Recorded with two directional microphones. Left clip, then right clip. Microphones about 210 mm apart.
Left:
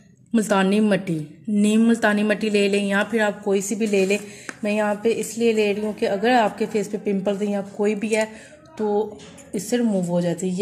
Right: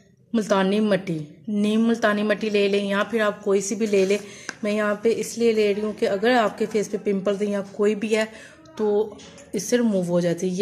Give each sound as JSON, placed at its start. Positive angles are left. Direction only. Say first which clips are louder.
{"t": 0.3, "sound": "a woman's voice", "louder": "left 1 dB", "side_deg": 0}
{"t": 9.5, "sound": "a woman's voice", "louder": "right 1 dB", "side_deg": -15}